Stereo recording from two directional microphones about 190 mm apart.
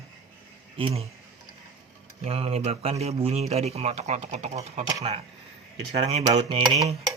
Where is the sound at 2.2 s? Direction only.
30° right (ahead or behind).